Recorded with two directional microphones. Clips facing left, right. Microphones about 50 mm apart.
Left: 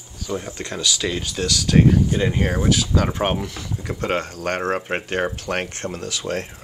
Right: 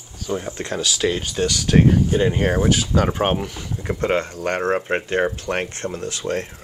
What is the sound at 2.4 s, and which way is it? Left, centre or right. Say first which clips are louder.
Speech: right 2 dB; centre.